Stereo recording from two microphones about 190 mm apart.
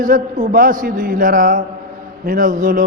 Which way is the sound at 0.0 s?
45° right (ahead or behind).